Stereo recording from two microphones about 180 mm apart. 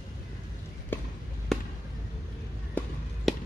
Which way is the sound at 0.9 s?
10° left (ahead or behind).